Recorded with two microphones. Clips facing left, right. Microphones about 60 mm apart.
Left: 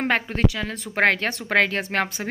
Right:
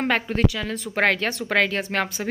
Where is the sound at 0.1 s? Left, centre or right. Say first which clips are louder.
Even; left.